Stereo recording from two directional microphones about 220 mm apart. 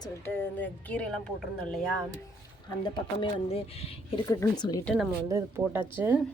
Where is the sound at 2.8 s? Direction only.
20° left (ahead or behind).